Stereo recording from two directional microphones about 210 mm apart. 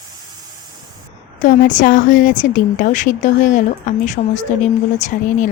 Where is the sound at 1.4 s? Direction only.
40° left (ahead or behind).